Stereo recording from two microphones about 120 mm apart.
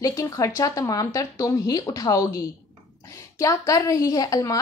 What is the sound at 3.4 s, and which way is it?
A woman's voice, 30° left (ahead or behind).